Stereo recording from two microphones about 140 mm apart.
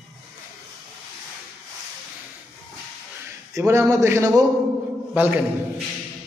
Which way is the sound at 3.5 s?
20° right (ahead or behind).